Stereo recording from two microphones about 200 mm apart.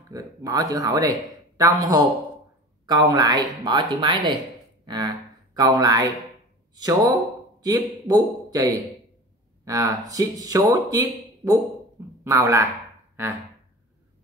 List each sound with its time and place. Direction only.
0.1 s speech: 20° right (ahead or behind)
4.8 s a sound: 20° right (ahead or behind)
6.7 s a man's voice: 20° right (ahead or behind)